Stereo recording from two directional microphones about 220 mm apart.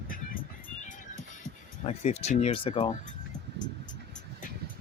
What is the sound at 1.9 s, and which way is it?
Speech, 30° left (ahead or behind).